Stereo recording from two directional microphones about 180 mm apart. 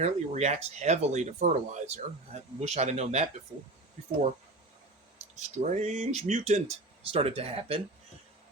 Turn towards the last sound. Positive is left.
turn(degrees=-30)  # may be behind; listen again after turning